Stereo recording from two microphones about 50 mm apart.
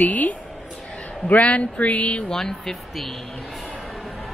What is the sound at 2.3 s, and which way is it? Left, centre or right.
Speech, centre.